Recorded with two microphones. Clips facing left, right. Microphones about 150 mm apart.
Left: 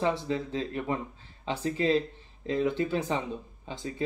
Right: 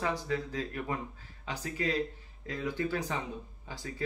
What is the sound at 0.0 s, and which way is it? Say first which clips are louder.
Speech: left 4 dB; 25° left (ahead or behind).